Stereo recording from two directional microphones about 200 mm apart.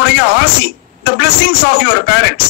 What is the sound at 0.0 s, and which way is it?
Speech, 60° left (ahead or behind).